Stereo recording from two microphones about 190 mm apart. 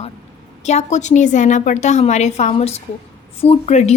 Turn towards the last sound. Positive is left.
turn(degrees=35)  # may be behind; listen again after turning